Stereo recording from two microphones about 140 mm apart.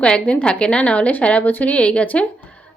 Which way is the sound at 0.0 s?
10° left (ahead or behind).